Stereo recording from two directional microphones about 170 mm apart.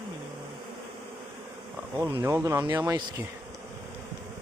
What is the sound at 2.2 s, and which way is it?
Speech, 15° right (ahead or behind).